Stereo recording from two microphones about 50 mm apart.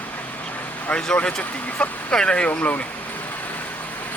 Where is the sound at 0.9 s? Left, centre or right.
Left.